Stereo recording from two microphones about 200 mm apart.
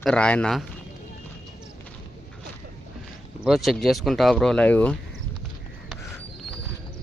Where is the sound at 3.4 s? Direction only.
Centre (ahead or behind).